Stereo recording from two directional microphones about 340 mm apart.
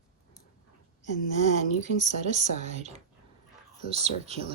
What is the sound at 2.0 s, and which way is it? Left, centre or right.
Speech, centre.